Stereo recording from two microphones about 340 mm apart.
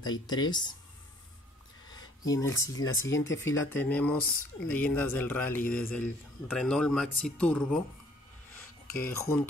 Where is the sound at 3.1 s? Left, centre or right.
Left.